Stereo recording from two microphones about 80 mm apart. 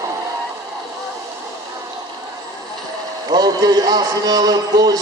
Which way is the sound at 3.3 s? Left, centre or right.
Right.